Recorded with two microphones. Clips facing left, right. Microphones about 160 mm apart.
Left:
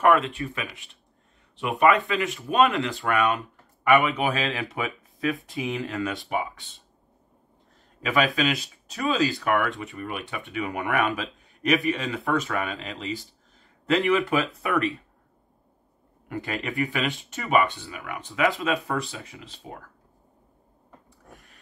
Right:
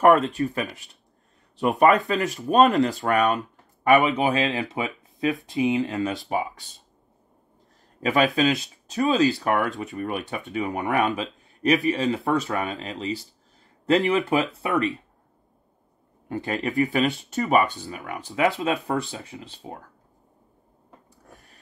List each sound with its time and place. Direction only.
0.0 s speech: 40° right (ahead or behind)
4.0 s speech: 25° right (ahead or behind)
8.0 s speech: 35° right (ahead or behind)
11.1 s a sound: 30° right (ahead or behind)
11.9 s speech: 30° right (ahead or behind)
13.8 s speech: 35° right (ahead or behind)
16.3 s speech: 30° right (ahead or behind)